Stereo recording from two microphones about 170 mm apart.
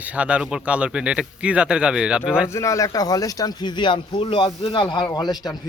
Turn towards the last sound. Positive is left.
turn(degrees=25)  # may be behind; listen again after turning